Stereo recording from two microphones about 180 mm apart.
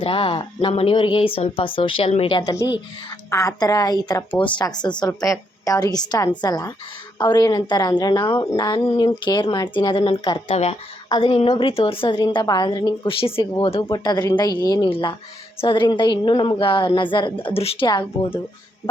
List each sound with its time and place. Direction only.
0.0 s speech: 30° left (ahead or behind)
8.8 s speech: 35° left (ahead or behind)
9.0 s speech: 25° left (ahead or behind)
10.5 s speech: 35° left (ahead or behind)